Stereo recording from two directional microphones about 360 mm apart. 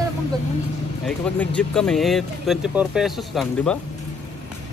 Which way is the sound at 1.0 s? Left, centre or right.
Centre.